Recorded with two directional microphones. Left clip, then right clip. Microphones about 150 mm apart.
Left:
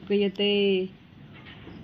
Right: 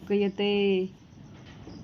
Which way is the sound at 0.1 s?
10° right (ahead or behind).